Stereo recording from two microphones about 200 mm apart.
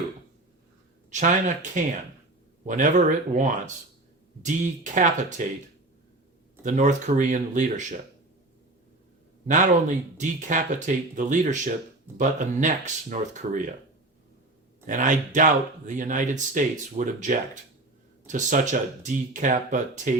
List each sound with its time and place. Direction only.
1.1 s speech: 40° right (ahead or behind)
6.6 s speech: 40° right (ahead or behind)
10.2 s speech: 40° right (ahead or behind)
14.8 s speech: 40° right (ahead or behind)